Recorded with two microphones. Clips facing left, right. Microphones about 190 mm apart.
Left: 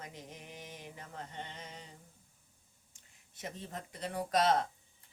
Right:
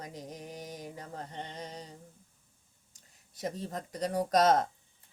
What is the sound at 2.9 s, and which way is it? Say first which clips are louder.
Speech: right 8 dB; 40° right (ahead or behind).